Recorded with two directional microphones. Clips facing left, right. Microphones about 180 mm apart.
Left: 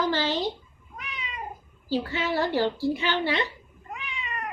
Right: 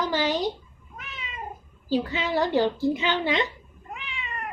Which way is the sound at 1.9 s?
20° right (ahead or behind).